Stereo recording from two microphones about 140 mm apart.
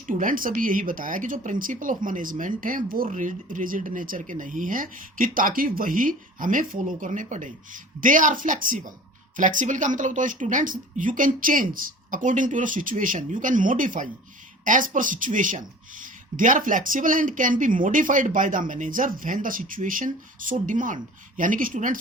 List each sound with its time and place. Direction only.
0.1 s speech: 70° right (ahead or behind)